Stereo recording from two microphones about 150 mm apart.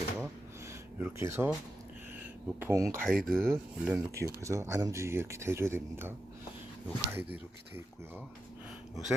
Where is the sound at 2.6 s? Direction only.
20° right (ahead or behind).